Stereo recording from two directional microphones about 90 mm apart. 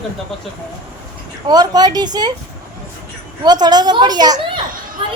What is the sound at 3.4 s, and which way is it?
Speech, 50° right (ahead or behind).